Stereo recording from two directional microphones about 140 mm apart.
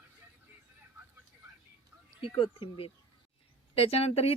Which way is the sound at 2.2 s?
40° left (ahead or behind).